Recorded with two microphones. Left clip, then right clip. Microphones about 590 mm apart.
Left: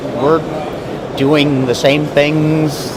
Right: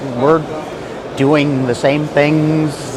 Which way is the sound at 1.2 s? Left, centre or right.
Right.